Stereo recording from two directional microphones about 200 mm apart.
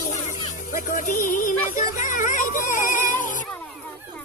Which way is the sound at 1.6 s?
40° left (ahead or behind).